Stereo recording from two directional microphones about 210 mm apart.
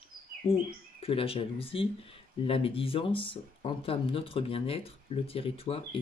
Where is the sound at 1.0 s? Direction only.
25° left (ahead or behind).